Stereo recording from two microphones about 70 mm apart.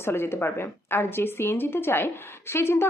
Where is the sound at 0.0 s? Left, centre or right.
Left.